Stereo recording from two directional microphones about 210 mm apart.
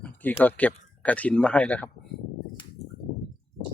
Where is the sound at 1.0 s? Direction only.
5° left (ahead or behind).